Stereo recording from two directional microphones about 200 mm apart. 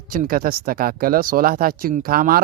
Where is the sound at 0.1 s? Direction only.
45° right (ahead or behind).